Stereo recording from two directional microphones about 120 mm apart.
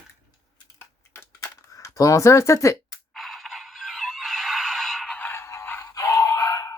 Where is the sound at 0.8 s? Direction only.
20° left (ahead or behind).